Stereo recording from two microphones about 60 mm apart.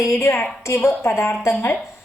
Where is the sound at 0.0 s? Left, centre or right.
Left.